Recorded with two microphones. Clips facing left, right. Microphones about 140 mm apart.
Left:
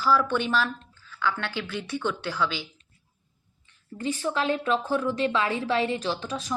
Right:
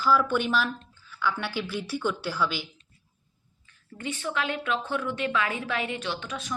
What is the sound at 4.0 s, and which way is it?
A woman's voice, 35° left (ahead or behind).